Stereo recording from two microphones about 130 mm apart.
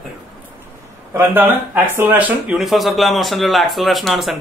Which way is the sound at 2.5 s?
Centre (ahead or behind).